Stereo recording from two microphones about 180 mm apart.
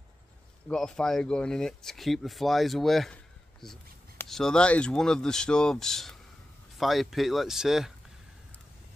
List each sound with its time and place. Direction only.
0.7 s speech: 5° left (ahead or behind)